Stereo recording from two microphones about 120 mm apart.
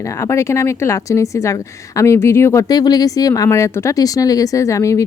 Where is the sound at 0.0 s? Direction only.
25° left (ahead or behind).